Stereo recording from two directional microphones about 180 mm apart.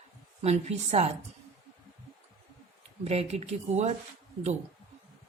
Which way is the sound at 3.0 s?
35° right (ahead or behind).